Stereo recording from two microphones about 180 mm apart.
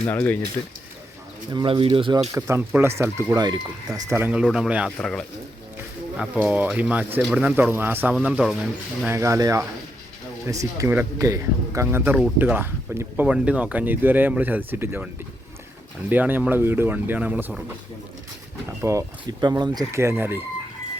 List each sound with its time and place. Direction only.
0.0 s speech: 10° left (ahead or behind)
1.5 s speech: 25° right (ahead or behind); by 5.2 s 5° left (ahead or behind)
6.1 s speech: 10° right (ahead or behind)
9.0 s speech: 15° right (ahead or behind)
18.8 s speech: 15° right (ahead or behind)